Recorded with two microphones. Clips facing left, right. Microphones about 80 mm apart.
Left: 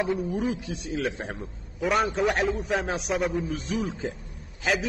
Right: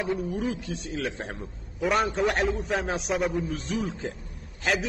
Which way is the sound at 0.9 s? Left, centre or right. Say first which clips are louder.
Left 3 dB; centre.